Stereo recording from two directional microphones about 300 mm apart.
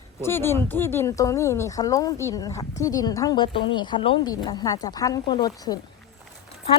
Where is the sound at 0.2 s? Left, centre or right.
Centre.